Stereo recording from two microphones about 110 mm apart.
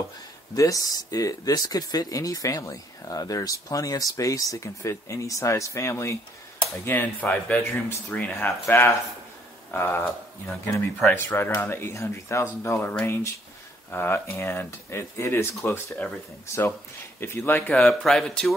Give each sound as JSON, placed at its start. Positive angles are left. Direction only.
{"t": 0.6, "sound": "speech", "side_deg": 30}